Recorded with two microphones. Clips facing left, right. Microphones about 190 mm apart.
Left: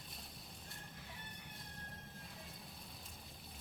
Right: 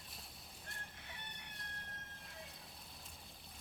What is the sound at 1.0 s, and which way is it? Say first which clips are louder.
Chicken: left 1 dB; 70° right (ahead or behind).